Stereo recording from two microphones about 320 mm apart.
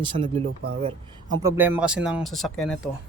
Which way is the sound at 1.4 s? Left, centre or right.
Centre.